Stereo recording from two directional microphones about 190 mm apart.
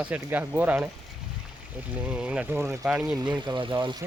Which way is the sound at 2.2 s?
5° right (ahead or behind).